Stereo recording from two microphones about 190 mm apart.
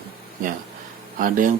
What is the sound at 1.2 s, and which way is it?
Speech, 45° right (ahead or behind).